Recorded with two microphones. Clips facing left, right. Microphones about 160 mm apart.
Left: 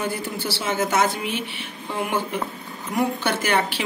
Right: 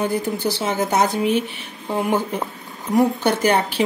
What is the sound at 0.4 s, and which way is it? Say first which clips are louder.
Speech: right 3 dB; 40° right (ahead or behind).